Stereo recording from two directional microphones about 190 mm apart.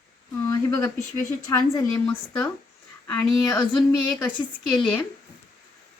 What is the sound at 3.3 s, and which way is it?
Speech, centre (ahead or behind).